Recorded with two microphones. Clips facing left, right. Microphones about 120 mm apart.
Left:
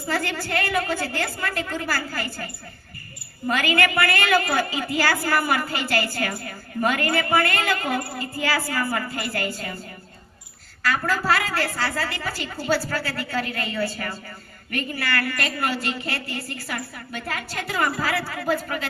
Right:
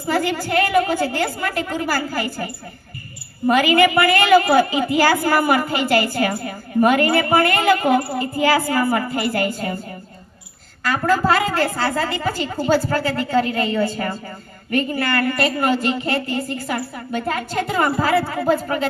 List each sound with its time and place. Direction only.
0.1 s a woman's voice: 15° right (ahead or behind)
10.8 s a woman's voice: 20° right (ahead or behind)